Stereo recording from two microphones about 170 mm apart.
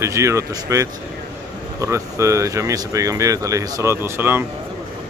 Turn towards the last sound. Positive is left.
turn(degrees=-15)  # may be behind; listen again after turning